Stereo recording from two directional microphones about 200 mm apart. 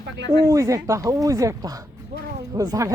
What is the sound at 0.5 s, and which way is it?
Speech, 15° right (ahead or behind).